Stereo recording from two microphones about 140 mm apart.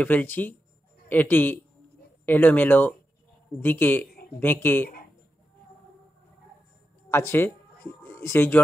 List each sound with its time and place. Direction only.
0.0 s speech: 15° left (ahead or behind)
7.1 s speech: 15° left (ahead or behind)